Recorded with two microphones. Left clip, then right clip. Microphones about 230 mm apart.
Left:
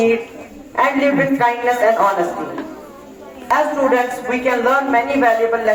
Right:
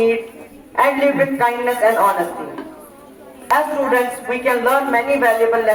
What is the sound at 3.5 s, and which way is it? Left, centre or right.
A man's voice, right.